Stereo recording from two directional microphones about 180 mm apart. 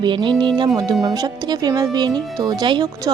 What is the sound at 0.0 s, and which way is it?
Speech, 25° right (ahead or behind).